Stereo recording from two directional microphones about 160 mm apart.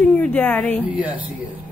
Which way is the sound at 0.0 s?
10° left (ahead or behind).